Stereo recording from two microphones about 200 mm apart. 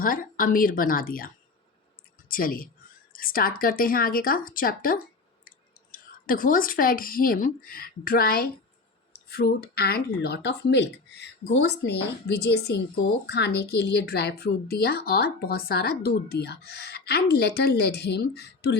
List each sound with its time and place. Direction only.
0.0 s a woman's voice: 45° left (ahead or behind)
2.3 s a woman's voice: 45° left (ahead or behind)